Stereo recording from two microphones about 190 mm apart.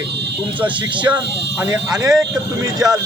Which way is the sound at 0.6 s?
25° right (ahead or behind).